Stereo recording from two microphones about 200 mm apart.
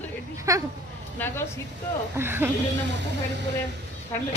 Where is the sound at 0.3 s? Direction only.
15° right (ahead or behind).